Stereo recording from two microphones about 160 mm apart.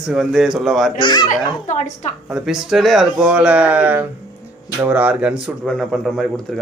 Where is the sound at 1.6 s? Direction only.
45° left (ahead or behind).